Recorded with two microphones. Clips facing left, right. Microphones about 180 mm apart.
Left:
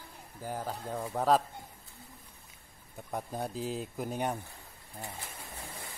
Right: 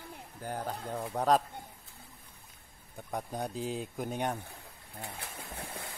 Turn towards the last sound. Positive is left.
turn(degrees=-60)  # may be behind; listen again after turning